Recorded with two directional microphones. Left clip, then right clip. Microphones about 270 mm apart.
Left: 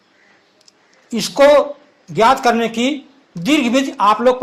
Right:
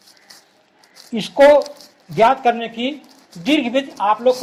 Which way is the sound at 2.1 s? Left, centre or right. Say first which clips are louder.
Left 2 dB; centre.